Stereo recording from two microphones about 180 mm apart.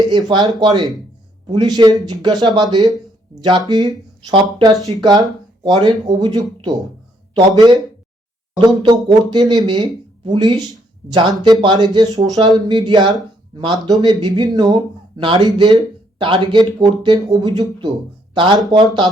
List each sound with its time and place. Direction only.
0.1 s speech: 25° right (ahead or behind)